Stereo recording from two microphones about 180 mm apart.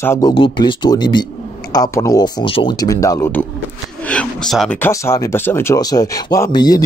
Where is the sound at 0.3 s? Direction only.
30° left (ahead or behind).